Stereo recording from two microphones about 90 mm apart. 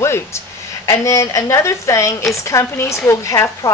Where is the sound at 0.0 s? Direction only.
30° left (ahead or behind).